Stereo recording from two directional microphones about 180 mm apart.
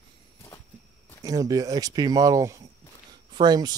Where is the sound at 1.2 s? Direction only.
20° right (ahead or behind).